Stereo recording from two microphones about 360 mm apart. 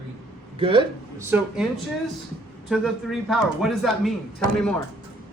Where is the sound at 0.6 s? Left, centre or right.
Centre.